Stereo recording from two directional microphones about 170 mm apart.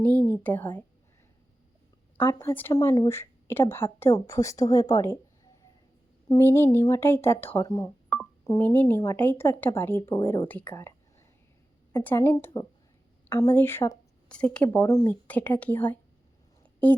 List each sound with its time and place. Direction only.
0.0 s speech: 10° left (ahead or behind)
2.1 s a woman's voice: 10° left (ahead or behind)
6.2 s a woman's voice: 20° left (ahead or behind)
10.5 s a sound: 10° left (ahead or behind)
12.0 s a woman's voice: 15° left (ahead or behind)